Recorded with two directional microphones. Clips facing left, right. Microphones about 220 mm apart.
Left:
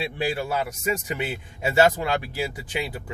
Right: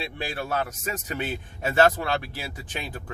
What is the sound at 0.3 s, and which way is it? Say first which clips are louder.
Speech: even; 10° left (ahead or behind).